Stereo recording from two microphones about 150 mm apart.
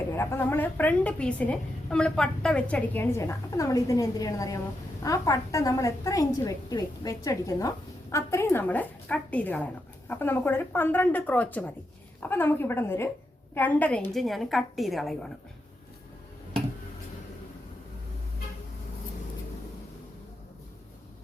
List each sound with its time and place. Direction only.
0.1 s a woman's voice: 15° left (ahead or behind); by 15.3 s centre (ahead or behind)